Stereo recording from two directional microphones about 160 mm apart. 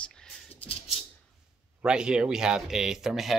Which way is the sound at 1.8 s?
5° right (ahead or behind).